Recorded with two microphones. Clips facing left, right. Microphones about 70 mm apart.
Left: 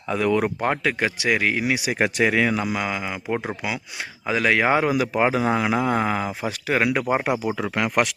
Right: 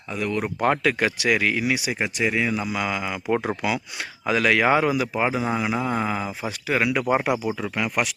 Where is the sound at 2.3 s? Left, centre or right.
Left.